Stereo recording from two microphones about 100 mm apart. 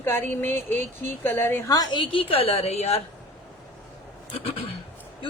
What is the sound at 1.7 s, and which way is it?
Speech, 45° left (ahead or behind).